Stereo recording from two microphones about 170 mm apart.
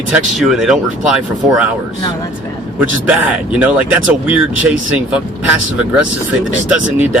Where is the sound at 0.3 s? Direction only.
Centre (ahead or behind).